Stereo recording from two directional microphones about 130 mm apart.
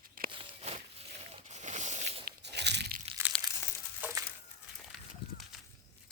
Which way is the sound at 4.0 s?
20° right (ahead or behind).